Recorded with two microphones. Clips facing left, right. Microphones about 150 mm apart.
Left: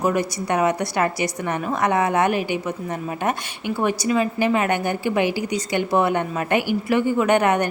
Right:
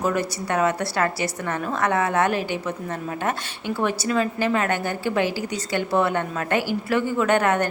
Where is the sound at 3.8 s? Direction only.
15° left (ahead or behind).